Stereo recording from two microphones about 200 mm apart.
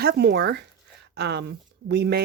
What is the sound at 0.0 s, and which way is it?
Speech, 55° right (ahead or behind).